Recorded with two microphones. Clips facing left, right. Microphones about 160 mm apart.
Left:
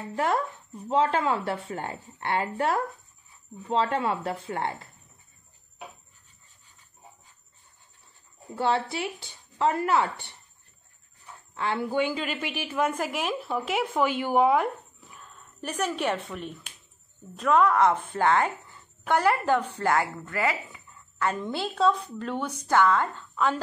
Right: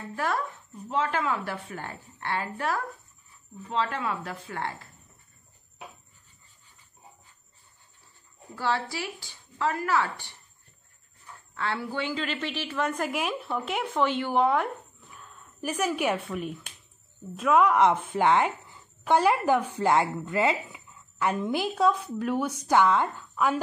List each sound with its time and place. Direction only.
0.1 s a woman's voice: 20° left (ahead or behind)
8.5 s a woman's voice: 25° left (ahead or behind)
11.5 s a woman's voice: 20° left (ahead or behind); by 23.6 s 10° right (ahead or behind)